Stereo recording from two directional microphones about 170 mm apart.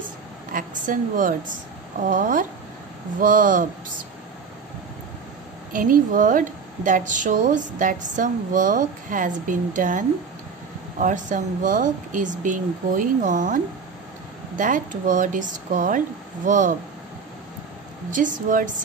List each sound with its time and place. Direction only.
0.5 s a woman's voice: 50° right (ahead or behind)
5.7 s a woman's voice: 50° right (ahead or behind)
14.6 s a woman's voice: 50° right (ahead or behind)
18.1 s a woman's voice: 50° right (ahead or behind)